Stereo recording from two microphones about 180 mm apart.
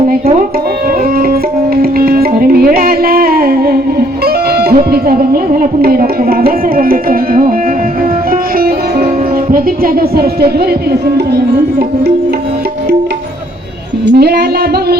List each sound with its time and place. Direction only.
1.3 s music: 60° right (ahead or behind)
14.1 s music: 65° right (ahead or behind)